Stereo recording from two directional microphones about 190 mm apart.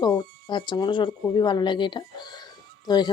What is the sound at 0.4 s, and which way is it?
Speech, 25° left (ahead or behind).